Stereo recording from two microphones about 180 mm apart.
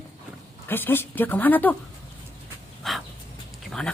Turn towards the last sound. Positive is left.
turn(degrees=5)  # may be behind; listen again after turning